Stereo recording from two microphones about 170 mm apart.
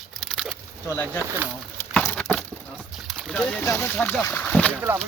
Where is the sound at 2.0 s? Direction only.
10° left (ahead or behind).